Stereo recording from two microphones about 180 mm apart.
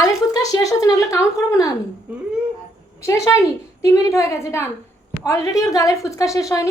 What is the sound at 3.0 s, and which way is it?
A woman's voice, 15° left (ahead or behind).